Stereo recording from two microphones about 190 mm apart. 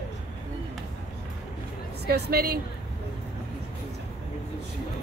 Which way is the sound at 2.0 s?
55° right (ahead or behind).